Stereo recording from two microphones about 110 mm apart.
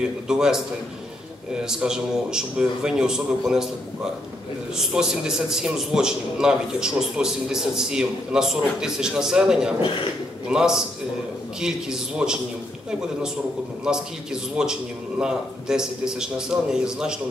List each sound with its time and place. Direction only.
0.3 s a man's voice: 5° right (ahead or behind)
4.7 s a man's voice: 5° right (ahead or behind)
13.9 s a man's voice: 5° right (ahead or behind)